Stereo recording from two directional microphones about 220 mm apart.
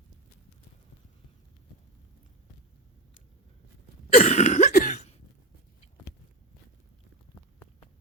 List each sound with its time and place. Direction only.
4.1 s cough: 30° left (ahead or behind)